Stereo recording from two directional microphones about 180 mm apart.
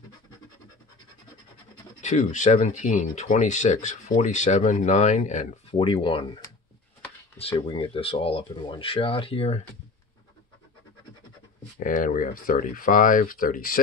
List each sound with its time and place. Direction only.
2.0 s speech: 40° left (ahead or behind)
5.7 s speech: 30° left (ahead or behind)
7.5 s speech: 25° left (ahead or behind)
11.8 s speech: 45° left (ahead or behind)